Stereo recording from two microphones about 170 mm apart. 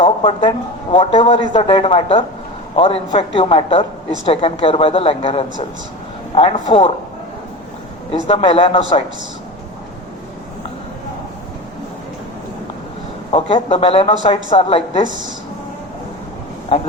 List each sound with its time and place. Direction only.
0.0 s a man's voice: 30° left (ahead or behind)
8.1 s a man's voice: 35° left (ahead or behind)
13.3 s a man's voice: 35° left (ahead or behind)